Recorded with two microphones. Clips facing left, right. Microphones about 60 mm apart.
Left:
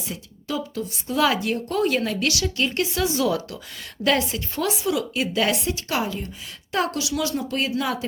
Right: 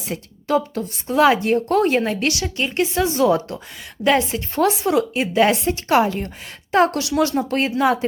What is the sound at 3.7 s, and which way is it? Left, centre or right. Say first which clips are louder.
Speech: right 4 dB; centre.